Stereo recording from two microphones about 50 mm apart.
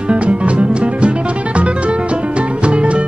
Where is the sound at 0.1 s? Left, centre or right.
Right.